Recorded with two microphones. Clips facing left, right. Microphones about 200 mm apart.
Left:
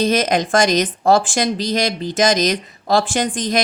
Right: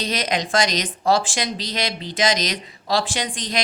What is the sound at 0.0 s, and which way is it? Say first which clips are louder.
Speech: left 8 dB; 50° left (ahead or behind).